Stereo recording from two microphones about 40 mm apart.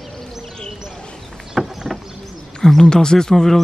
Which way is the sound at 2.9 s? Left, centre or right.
Centre.